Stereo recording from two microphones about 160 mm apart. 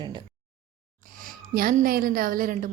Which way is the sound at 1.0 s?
60° right (ahead or behind).